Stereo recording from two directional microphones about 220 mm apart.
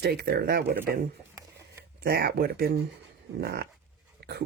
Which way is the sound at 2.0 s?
45° right (ahead or behind).